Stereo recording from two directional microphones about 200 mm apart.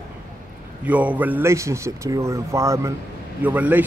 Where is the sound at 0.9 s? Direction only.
5° right (ahead or behind).